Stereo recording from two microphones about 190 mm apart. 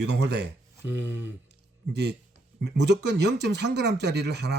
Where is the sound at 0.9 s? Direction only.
10° right (ahead or behind).